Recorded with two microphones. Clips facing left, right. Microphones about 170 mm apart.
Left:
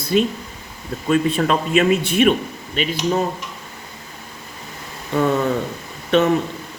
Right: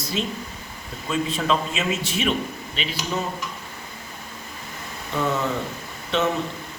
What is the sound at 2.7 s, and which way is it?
Speech, 50° left (ahead or behind).